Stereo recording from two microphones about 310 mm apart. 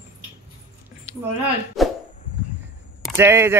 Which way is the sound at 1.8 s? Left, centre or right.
Centre.